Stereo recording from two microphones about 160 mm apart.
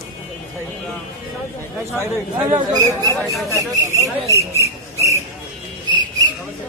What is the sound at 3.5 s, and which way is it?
Speech, 20° right (ahead or behind).